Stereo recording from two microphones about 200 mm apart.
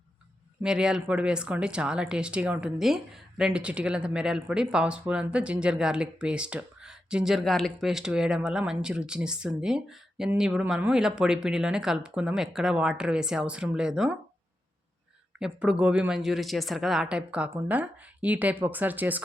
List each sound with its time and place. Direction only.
0.6 s speech: 5° right (ahead or behind)
15.4 s speech: 5° right (ahead or behind)